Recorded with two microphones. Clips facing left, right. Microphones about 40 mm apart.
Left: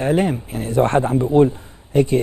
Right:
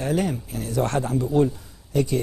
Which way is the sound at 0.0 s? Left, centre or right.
Left.